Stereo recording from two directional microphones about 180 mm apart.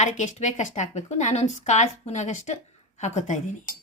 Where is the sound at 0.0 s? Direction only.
40° left (ahead or behind).